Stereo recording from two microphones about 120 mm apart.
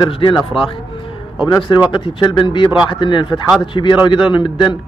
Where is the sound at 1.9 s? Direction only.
45° left (ahead or behind).